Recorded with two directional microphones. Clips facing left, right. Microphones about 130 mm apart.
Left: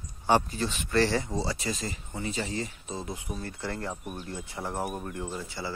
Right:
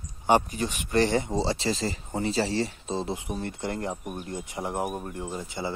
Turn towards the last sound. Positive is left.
turn(degrees=-20)  # may be behind; listen again after turning